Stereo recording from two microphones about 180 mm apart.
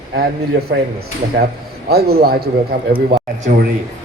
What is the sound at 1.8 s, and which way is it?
A woman's voice, 60° right (ahead or behind).